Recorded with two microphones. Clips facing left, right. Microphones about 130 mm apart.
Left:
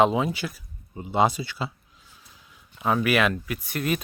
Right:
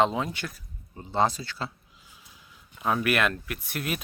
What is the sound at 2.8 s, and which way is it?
Speech, centre (ahead or behind).